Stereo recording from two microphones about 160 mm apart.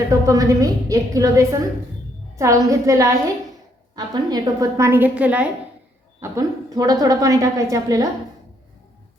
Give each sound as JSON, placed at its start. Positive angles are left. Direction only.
{"t": 0.1, "sound": "a woman's voice", "side_deg": -20}